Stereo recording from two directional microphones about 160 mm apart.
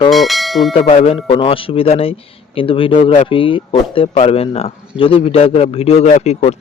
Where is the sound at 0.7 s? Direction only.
35° left (ahead or behind).